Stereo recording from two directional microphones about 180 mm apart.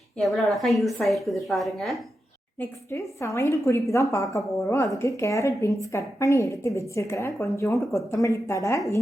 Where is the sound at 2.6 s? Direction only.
15° left (ahead or behind).